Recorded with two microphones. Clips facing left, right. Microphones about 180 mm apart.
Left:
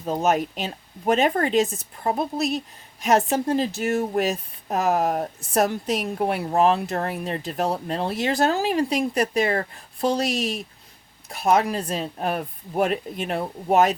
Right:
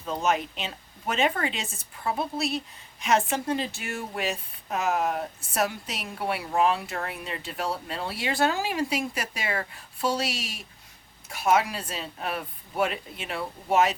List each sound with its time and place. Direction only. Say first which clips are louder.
0.0 s speech: left 5 dB; 45° left (ahead or behind)